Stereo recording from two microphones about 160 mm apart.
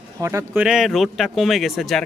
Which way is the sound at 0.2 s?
20° right (ahead or behind).